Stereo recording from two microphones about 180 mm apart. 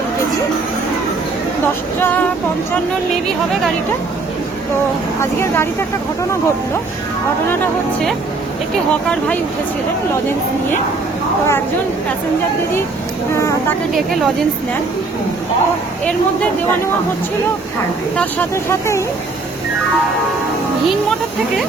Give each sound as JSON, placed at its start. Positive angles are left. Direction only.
{"t": 2.0, "sound": "speech", "side_deg": 10}
{"t": 5.2, "sound": "speech", "side_deg": 15}
{"t": 8.9, "sound": "speech", "side_deg": 5}
{"t": 18.2, "sound": "speech", "side_deg": 10}